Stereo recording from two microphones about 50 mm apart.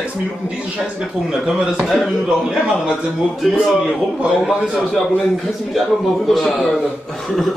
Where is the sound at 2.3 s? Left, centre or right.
Centre.